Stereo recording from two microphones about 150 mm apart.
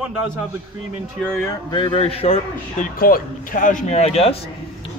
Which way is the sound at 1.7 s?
35° left (ahead or behind).